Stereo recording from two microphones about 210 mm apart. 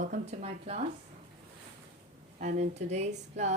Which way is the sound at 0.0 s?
35° right (ahead or behind).